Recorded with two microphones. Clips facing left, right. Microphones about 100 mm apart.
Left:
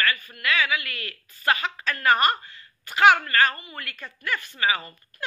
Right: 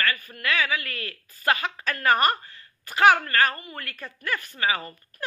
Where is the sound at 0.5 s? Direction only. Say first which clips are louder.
Left 1 dB; 35° right (ahead or behind).